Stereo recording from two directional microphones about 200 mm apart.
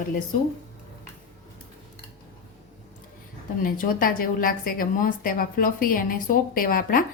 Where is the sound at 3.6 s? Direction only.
45° left (ahead or behind).